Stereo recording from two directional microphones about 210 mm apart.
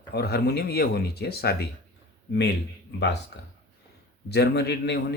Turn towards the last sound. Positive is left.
turn(degrees=55)  # may be behind; listen again after turning